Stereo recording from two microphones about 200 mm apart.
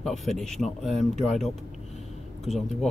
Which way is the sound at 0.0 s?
Centre (ahead or behind).